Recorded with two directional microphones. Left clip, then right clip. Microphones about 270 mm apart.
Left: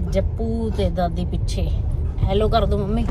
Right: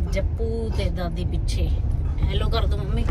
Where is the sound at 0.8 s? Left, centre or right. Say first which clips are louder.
Left 7 dB; centre.